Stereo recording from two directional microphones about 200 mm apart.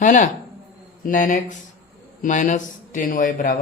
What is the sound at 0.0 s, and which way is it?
A man's voice, 40° left (ahead or behind).